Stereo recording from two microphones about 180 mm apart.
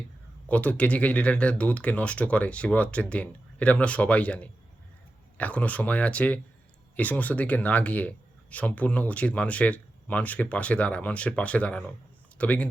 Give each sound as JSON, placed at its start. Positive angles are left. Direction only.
{"t": 0.4, "sound": "speech", "side_deg": 10}